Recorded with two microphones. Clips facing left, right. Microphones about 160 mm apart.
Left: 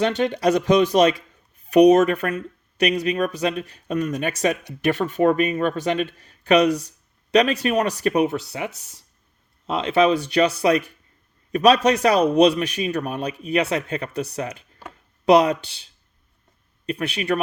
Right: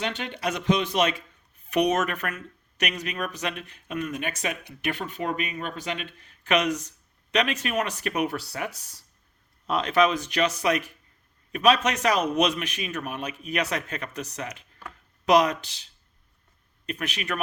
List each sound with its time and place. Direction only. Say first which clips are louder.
0.0 s speech: left 10 dB; 40° left (ahead or behind)
8.4 s speech: left 4 dB; 20° left (ahead or behind)